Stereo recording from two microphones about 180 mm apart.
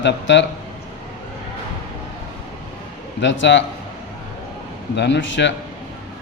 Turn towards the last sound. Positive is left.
turn(degrees=80)